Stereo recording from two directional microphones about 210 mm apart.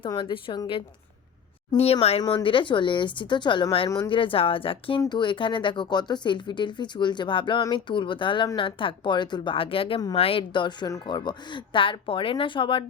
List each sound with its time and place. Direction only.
0.0 s speech: 25° left (ahead or behind)